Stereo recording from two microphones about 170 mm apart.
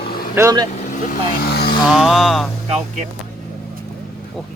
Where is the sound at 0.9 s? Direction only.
55° left (ahead or behind).